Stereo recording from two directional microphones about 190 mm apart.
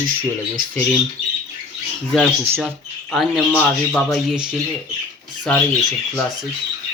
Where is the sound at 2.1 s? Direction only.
5° left (ahead or behind).